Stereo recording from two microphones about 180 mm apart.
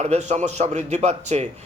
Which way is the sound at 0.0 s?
40° right (ahead or behind).